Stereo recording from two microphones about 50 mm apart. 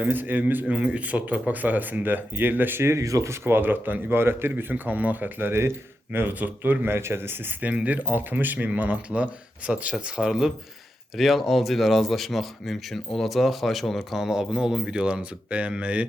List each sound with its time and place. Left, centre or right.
0.0 s speech: right
0.7 s speech: right
2.8 s speech: right
3.4 s speech: right
4.7 s speech: right
5.4 s speech: right
6.1 s speech: right
6.8 s speech: right
7.6 s speech: right
10.2 s speech: centre
11.2 s speech: centre; by 16.0 s right